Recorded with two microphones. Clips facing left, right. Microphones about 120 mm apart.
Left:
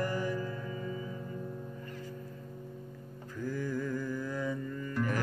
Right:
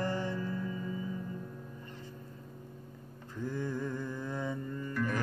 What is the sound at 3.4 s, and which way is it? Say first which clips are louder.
Mantra: left 1 dB; 25° right (ahead or behind).